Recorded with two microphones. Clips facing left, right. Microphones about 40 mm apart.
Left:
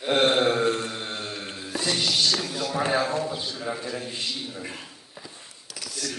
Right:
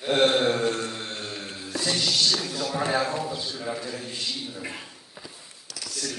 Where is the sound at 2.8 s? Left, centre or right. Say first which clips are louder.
Left 1 dB; centre.